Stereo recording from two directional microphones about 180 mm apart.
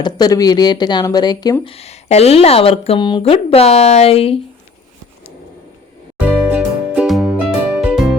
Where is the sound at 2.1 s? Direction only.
35° left (ahead or behind).